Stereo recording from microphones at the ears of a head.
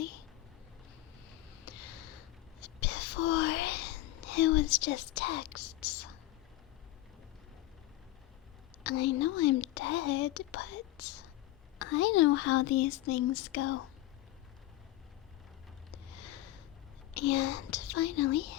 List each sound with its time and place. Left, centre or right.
1.3 s whispering: left
8.8 s speech: left
15.9 s a sound: left
17.2 s speech: left